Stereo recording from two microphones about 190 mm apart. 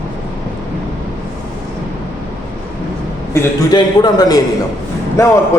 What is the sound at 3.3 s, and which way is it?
Speech, 20° left (ahead or behind).